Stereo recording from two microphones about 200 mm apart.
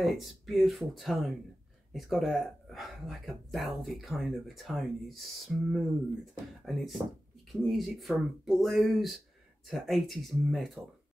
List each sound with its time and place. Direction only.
0.0 s speech: centre (ahead or behind)